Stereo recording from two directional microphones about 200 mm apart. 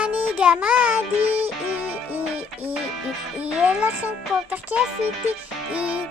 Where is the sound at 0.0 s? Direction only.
5° right (ahead or behind).